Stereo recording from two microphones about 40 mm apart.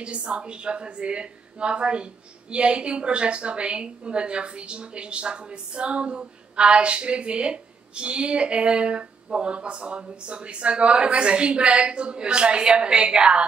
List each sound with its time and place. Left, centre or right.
0.0 s a woman's voice: right